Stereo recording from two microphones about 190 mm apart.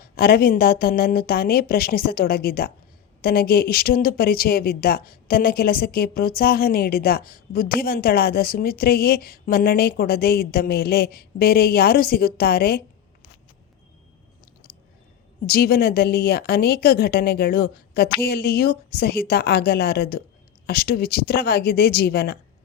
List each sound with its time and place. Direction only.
0.0 s a woman's voice: 55° left (ahead or behind)
15.4 s a woman's voice: 55° left (ahead or behind)